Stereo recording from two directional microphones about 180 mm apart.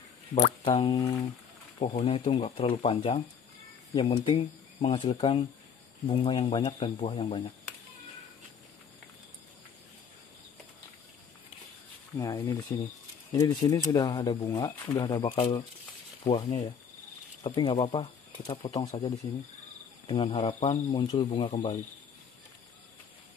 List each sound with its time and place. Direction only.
0.3 s speech: 30° left (ahead or behind)
12.2 s speech: 20° left (ahead or behind)
20.1 s speech: 35° left (ahead or behind)